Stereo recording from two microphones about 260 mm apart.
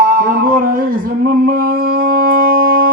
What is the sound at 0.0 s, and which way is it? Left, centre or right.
Mantra, right.